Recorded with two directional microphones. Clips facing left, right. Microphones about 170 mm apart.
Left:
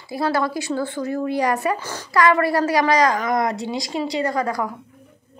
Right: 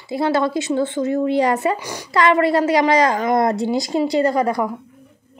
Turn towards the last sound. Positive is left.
turn(degrees=-25)  # may be behind; listen again after turning